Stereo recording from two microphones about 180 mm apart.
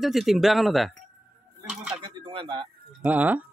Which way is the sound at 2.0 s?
30° right (ahead or behind).